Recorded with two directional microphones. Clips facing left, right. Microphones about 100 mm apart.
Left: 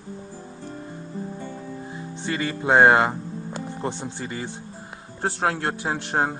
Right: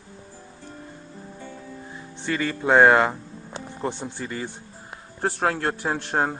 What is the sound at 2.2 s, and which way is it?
Speech, 15° left (ahead or behind).